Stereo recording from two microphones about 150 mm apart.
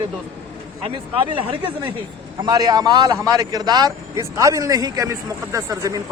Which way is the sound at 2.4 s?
25° right (ahead or behind).